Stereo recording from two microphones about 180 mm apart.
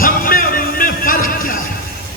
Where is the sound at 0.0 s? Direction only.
50° left (ahead or behind).